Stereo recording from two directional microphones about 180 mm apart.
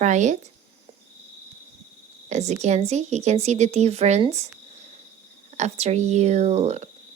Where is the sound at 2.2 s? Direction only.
40° right (ahead or behind).